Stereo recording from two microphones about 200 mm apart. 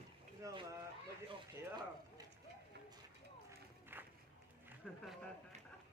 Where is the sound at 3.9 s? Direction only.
10° right (ahead or behind).